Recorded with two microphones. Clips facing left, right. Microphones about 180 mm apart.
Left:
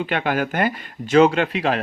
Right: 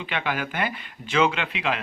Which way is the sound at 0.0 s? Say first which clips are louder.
Left 7 dB; 45° left (ahead or behind).